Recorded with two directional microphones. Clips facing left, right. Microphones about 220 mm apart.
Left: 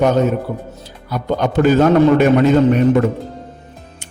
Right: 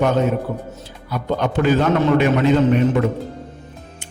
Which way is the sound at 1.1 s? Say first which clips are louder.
Left 3 dB; 40° left (ahead or behind).